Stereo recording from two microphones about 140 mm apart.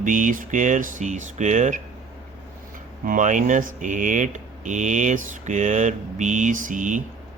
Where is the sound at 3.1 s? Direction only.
65° right (ahead or behind).